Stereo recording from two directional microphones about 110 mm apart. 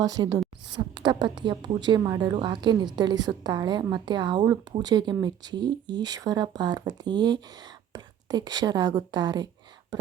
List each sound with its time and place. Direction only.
0.0 s speech: 35° right (ahead or behind)